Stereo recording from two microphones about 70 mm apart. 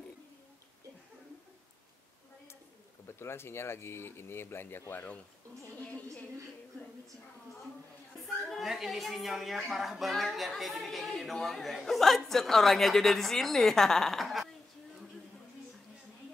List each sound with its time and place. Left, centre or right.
3.1 s speech: left
8.5 s a woman's voice: centre